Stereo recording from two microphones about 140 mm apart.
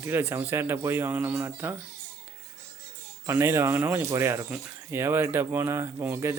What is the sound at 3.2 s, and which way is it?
Speech, 20° right (ahead or behind).